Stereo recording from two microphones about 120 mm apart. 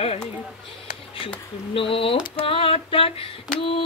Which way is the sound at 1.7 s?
50° left (ahead or behind).